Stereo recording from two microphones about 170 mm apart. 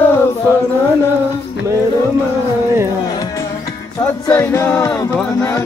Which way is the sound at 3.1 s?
20° left (ahead or behind).